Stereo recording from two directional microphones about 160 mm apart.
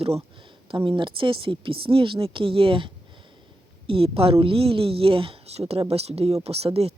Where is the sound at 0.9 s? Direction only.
30° right (ahead or behind).